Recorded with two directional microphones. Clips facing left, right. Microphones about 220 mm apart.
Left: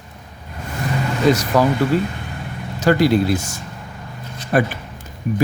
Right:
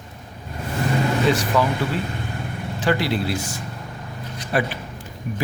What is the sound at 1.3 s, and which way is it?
Speech, 40° left (ahead or behind).